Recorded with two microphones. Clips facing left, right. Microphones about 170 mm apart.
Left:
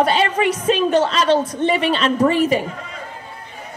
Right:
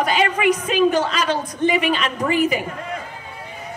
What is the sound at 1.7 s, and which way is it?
Speech, 30° left (ahead or behind).